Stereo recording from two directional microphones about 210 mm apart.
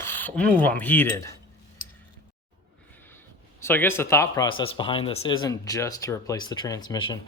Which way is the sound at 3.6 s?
10° left (ahead or behind).